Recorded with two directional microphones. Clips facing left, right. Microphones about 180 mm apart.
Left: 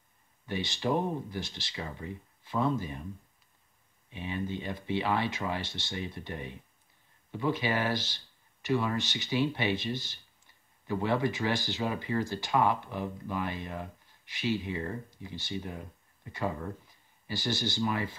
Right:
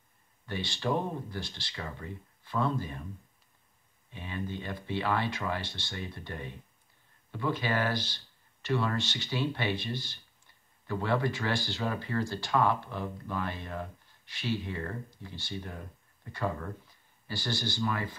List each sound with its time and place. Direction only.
0.5 s speech: 20° left (ahead or behind)
4.1 s speech: 20° left (ahead or behind)